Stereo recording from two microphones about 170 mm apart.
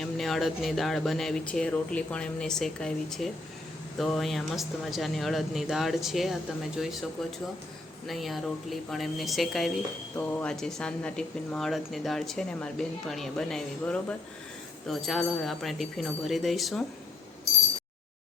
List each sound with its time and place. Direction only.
0.0 s speech: centre (ahead or behind)